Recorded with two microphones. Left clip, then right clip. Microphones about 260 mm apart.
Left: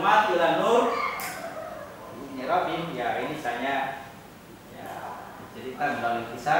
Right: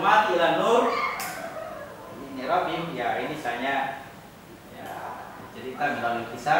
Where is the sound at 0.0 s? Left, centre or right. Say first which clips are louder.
Right 1 dB; centre.